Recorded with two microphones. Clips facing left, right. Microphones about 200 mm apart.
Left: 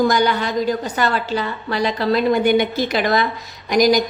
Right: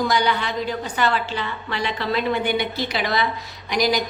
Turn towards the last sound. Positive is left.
turn(degrees=45)  # may be behind; listen again after turning